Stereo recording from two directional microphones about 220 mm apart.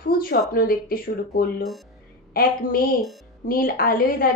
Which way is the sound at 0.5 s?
40° left (ahead or behind).